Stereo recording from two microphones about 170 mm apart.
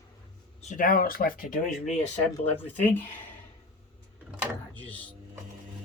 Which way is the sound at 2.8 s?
10° left (ahead or behind).